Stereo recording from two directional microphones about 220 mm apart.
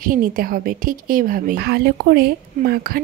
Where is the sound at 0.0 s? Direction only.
40° right (ahead or behind).